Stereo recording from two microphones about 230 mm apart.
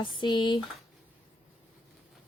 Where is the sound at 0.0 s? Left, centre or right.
Centre.